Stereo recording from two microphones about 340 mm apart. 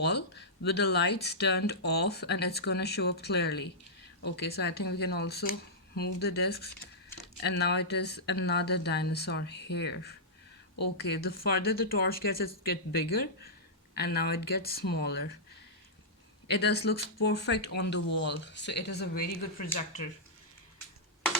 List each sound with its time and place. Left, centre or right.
0.0 s speech: left
16.5 s speech: left